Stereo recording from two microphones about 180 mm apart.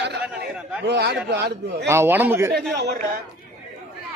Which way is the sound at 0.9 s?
65° right (ahead or behind).